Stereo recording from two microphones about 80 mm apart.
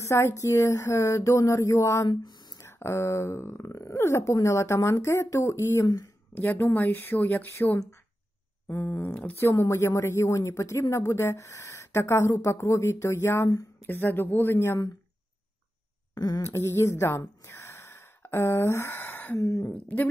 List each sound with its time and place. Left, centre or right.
0.0 s speech: left
2.0 s a sound: left
2.6 s speech: left
5.9 s a woman's voice: left
6.3 s a woman's voice: left
8.6 s a woman's voice: left
16.2 s a sound: left
16.4 s speech: left
17.4 s a sound: left
19.3 s speech: left
19.6 s a woman's voice: left